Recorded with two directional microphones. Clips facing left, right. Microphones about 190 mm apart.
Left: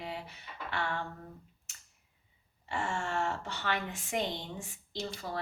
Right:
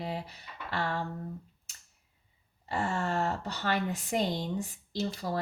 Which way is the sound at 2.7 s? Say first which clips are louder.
Right 4 dB; 40° right (ahead or behind).